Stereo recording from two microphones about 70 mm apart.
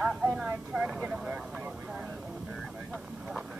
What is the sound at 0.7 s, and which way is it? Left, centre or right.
Vehicle, centre.